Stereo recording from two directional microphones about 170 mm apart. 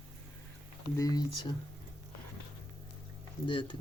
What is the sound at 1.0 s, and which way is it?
Speech, 20° left (ahead or behind).